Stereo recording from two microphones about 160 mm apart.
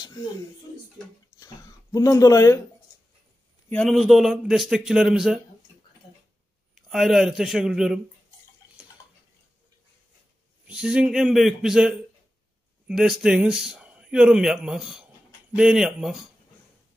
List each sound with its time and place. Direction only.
1.4 s speech: 20° left (ahead or behind)
3.6 s a man's voice: 10° left (ahead or behind)
3.9 s speech: centre (ahead or behind)
6.7 s speech: centre (ahead or behind)
10.7 s speech: 5° right (ahead or behind)